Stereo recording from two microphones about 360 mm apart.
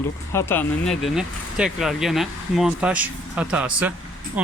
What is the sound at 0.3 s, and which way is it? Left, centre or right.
Speech, centre.